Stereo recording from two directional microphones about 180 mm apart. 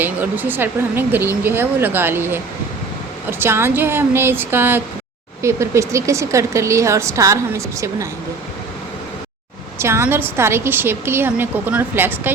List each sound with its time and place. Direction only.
0.0 s speech: 10° right (ahead or behind)
9.7 s speech: 15° right (ahead or behind)